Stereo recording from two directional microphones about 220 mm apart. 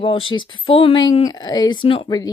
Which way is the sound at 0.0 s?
25° left (ahead or behind).